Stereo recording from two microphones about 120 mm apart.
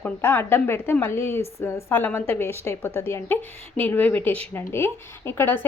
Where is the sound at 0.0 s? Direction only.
20° left (ahead or behind).